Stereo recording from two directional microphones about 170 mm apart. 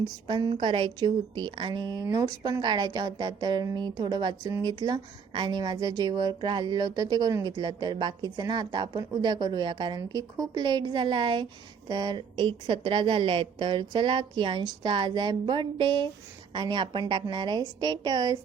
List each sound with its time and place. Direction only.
0.3 s a woman's voice: 25° right (ahead or behind)